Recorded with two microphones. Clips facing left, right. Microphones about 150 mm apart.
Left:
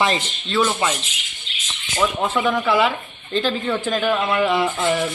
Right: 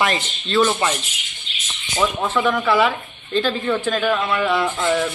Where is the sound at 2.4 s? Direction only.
5° left (ahead or behind).